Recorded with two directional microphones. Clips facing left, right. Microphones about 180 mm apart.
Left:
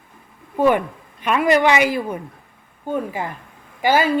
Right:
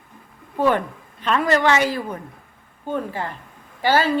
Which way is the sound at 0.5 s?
15° left (ahead or behind).